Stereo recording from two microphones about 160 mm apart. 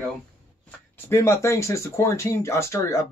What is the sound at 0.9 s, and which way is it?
Speech, 15° left (ahead or behind).